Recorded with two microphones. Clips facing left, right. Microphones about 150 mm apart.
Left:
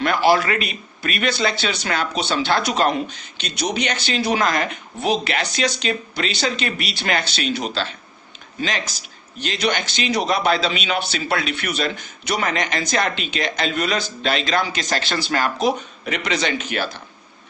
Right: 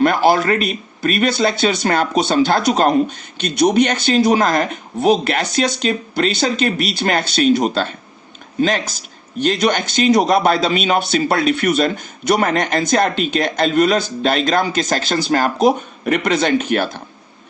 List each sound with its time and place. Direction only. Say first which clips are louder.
0.0 s speech: right 4 dB; 45° right (ahead or behind)